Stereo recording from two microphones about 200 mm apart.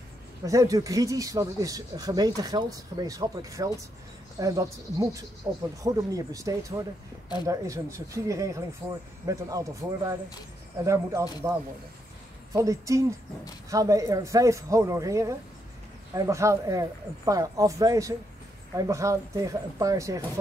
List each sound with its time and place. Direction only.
0.5 s speech: 15° right (ahead or behind)
12.5 s speech: 15° right (ahead or behind)